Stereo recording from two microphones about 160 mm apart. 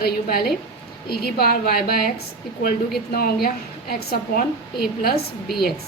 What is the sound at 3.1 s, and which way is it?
A woman's voice, 70° left (ahead or behind).